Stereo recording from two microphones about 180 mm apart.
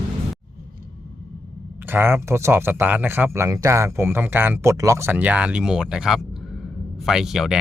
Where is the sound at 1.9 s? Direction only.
15° right (ahead or behind).